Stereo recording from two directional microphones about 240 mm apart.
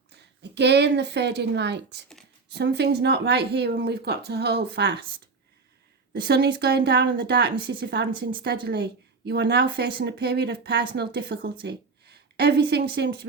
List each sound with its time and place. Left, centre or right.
0.1 s a woman's voice: right
6.1 s speech: right